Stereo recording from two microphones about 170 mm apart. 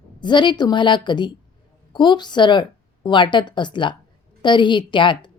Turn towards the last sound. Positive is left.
turn(degrees=30)  # may be behind; listen again after turning